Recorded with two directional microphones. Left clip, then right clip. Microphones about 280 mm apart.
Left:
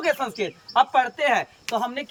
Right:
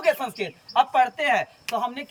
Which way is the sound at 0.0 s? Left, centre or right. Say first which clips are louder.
Even; centre.